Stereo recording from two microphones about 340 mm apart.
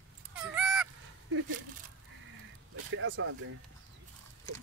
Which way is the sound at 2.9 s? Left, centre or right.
Right.